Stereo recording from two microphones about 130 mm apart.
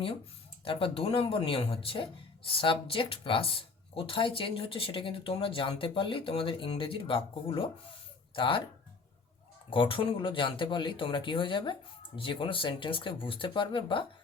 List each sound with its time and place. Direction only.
0.6 s speech: 45° left (ahead or behind)
9.6 s speech: 40° left (ahead or behind)